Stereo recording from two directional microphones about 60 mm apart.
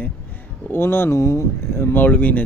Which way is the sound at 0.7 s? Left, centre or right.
Left.